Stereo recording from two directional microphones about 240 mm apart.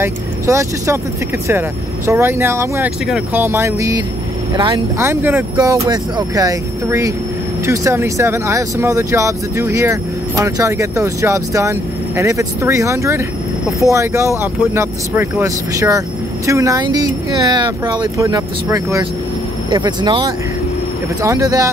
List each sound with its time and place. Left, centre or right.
0.0 s speech: centre
2.0 s speech: centre